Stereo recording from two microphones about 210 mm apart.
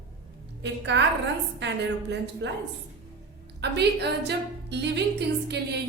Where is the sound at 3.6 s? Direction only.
55° right (ahead or behind).